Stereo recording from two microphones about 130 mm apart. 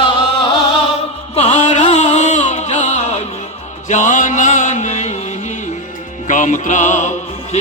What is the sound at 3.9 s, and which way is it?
Mantra, 70° left (ahead or behind).